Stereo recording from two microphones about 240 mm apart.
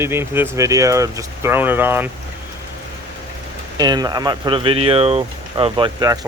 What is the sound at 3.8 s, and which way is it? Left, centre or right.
Speech, centre.